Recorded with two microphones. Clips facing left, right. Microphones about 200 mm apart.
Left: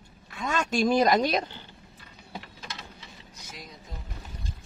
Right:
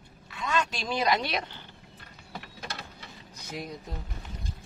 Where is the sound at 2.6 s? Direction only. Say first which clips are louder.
Right 2 dB; 60° right (ahead or behind).